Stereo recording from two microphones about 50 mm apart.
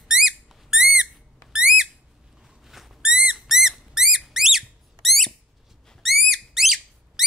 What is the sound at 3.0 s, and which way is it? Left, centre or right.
Owl, centre.